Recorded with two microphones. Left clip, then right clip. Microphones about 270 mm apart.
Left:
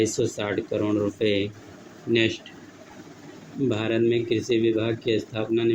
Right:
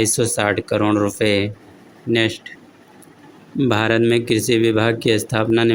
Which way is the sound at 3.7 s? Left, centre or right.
Right.